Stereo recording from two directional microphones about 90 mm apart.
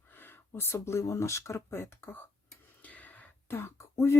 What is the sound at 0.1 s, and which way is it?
Speech, 25° left (ahead or behind).